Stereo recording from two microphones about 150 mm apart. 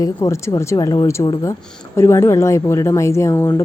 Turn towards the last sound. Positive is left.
turn(degrees=20)  # may be behind; listen again after turning